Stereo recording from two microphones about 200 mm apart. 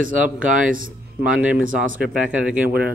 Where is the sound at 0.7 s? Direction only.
45° right (ahead or behind).